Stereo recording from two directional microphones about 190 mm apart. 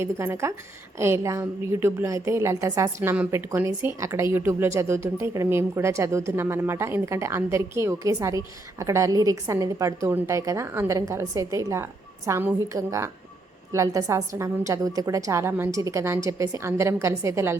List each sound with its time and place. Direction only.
0.0 s a woman's voice: 15° right (ahead or behind)